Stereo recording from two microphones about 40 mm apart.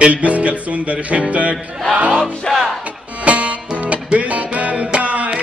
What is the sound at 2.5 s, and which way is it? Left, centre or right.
Music, centre.